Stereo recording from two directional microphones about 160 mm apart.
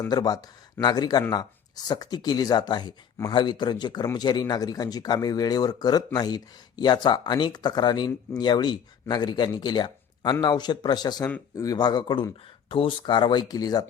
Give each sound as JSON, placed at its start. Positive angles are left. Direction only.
{"t": 0.1, "sound": "speech", "side_deg": 25}